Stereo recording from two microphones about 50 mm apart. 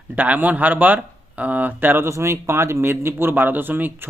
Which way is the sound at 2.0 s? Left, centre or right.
Right.